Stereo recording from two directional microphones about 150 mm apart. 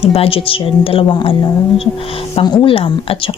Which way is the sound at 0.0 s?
40° left (ahead or behind).